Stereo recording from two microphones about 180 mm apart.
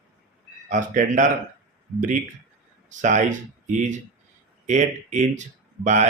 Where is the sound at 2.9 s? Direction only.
45° right (ahead or behind).